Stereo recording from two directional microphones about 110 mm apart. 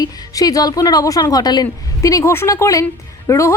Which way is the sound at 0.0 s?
35° left (ahead or behind).